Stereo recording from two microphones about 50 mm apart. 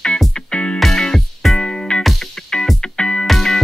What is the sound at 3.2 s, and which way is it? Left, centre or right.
Music, centre.